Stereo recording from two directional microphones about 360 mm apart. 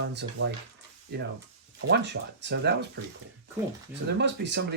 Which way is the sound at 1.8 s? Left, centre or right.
Right.